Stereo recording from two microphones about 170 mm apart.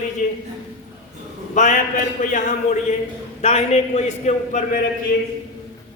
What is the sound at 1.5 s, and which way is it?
A man's voice, 45° left (ahead or behind).